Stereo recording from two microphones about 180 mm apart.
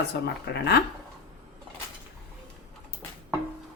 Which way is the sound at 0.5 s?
70° left (ahead or behind).